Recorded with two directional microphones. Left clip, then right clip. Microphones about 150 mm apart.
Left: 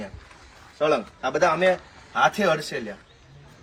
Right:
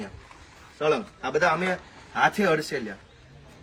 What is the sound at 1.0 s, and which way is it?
Speech, centre (ahead or behind).